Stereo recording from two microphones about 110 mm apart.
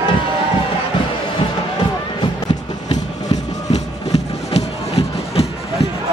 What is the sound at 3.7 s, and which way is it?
Music, 85° left.